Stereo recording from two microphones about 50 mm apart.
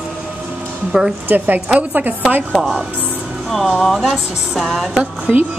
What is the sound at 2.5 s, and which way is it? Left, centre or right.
A woman's voice, centre.